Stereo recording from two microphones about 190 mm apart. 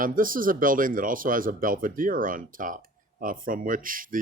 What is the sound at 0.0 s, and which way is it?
Speech, 45° right (ahead or behind).